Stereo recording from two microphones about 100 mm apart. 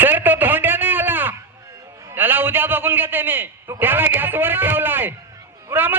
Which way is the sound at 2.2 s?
20° right (ahead or behind).